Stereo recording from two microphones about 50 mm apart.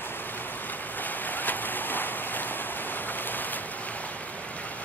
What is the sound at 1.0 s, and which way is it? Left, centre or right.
Rain on surface, left.